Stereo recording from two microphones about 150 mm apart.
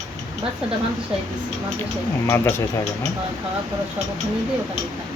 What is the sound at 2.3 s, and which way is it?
Speech, 15° left (ahead or behind).